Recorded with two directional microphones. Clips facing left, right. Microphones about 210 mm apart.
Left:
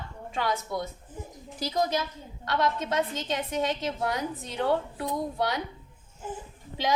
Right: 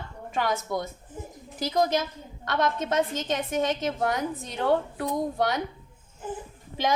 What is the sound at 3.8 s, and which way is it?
A woman's voice, 50° right (ahead or behind).